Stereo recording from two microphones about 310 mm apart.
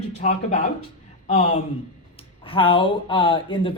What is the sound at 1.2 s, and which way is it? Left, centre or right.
A man's voice, centre.